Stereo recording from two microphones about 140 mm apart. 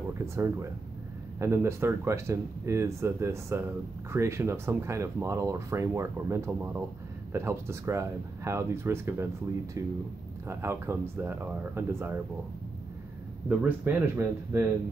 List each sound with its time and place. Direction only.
0.2 s speech: 20° right (ahead or behind)
13.5 s speech: 10° right (ahead or behind)